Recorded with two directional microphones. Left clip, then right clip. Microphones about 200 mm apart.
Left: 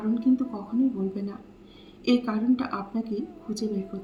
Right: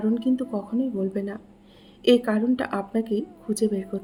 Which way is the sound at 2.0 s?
50° right (ahead or behind).